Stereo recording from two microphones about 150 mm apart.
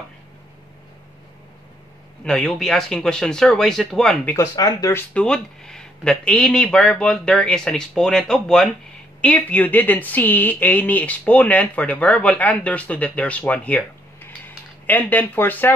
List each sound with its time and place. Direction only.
2.2 s speech: 5° left (ahead or behind)
4.4 s speech: 25° left (ahead or behind)
5.1 s speech: 5° left (ahead or behind)